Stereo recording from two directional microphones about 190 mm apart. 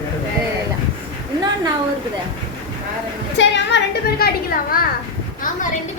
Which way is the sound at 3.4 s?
65° left (ahead or behind).